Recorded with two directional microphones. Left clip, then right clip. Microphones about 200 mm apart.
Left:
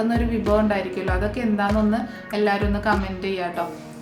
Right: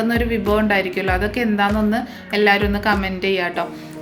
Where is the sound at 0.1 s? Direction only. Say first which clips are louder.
Right 3 dB; 20° right (ahead or behind).